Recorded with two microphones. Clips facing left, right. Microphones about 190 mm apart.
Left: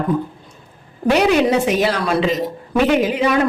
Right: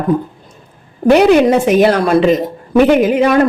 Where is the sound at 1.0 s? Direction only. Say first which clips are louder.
Right 6 dB; 55° right (ahead or behind).